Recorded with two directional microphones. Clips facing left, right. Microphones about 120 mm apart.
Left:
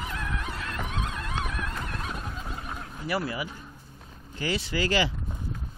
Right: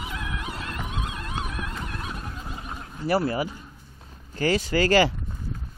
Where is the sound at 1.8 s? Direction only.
10° right (ahead or behind).